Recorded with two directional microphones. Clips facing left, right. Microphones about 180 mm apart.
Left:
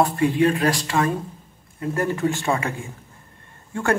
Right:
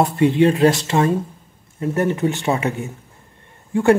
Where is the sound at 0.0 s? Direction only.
25° right (ahead or behind).